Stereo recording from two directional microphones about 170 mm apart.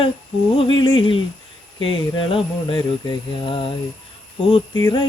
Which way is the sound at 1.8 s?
30° left (ahead or behind).